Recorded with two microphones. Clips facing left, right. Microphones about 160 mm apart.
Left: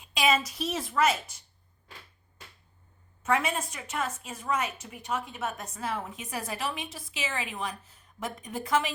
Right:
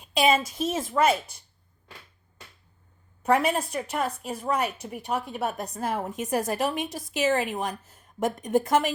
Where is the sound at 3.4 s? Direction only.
60° right (ahead or behind).